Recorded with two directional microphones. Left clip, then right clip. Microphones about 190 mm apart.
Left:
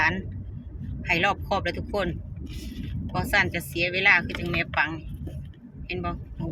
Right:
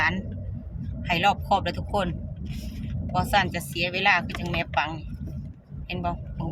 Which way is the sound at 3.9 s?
5° left (ahead or behind).